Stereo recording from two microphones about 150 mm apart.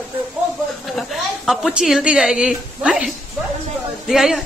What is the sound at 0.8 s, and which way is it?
A woman's voice, centre (ahead or behind).